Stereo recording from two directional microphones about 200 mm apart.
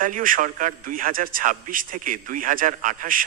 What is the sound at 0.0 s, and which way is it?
A man's voice, 45° right (ahead or behind).